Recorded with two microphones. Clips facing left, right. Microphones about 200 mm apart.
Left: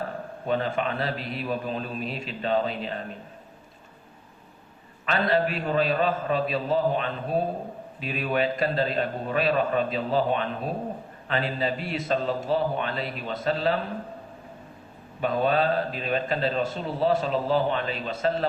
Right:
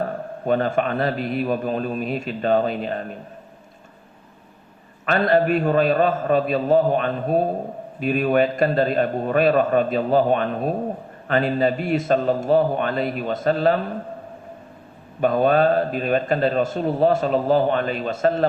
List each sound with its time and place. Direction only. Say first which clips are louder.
0.4 s a man's voice: right 6 dB; 50° right (ahead or behind)
5.0 s a man's voice: right 6 dB; 50° right (ahead or behind)
15.2 s a man's voice: right 6 dB; 50° right (ahead or behind)